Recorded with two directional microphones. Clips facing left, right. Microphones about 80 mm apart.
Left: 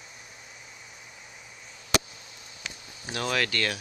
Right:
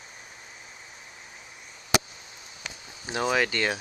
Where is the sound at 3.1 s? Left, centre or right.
Centre.